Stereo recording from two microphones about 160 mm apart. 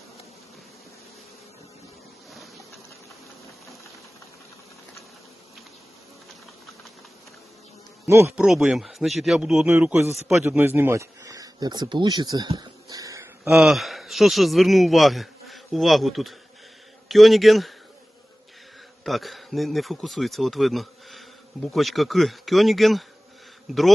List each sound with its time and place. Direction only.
2.3 s boat: centre (ahead or behind)
8.0 s speech: 15° right (ahead or behind)
8.4 s a man's voice: 5° right (ahead or behind); by 12.5 s 25° right (ahead or behind)
12.5 s a sound: 25° right (ahead or behind)
13.5 s a man's voice: centre (ahead or behind)
19.0 s a man's voice: centre (ahead or behind)